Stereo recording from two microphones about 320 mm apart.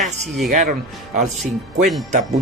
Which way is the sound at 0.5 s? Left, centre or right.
Right.